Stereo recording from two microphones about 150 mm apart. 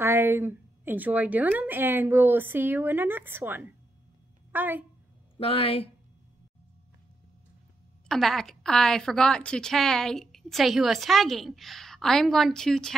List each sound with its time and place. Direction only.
0.0 s a woman's voice: 15° right (ahead or behind)
5.4 s a woman's voice: 40° left (ahead or behind)
8.1 s a woman's voice: 5° left (ahead or behind)